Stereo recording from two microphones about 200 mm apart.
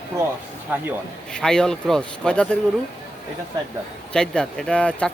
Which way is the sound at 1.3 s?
5° left (ahead or behind).